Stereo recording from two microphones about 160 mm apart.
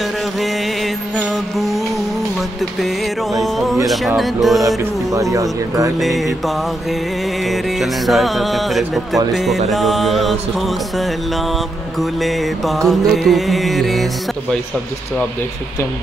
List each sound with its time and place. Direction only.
1.1 s music: centre (ahead or behind)
3.3 s music: centre (ahead or behind)
4.6 s speech: 20° right (ahead or behind)
5.9 s music: centre (ahead or behind)